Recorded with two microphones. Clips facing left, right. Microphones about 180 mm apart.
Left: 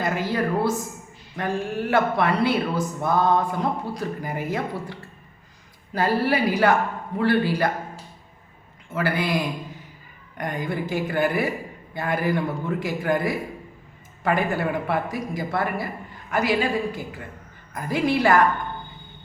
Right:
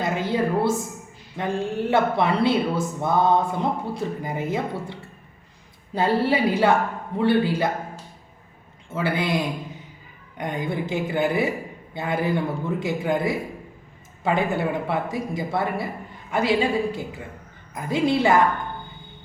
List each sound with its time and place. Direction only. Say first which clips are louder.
0.0 s a woman's voice: right 1 dB; 25° right (ahead or behind)
8.9 s speech: even; 25° right (ahead or behind)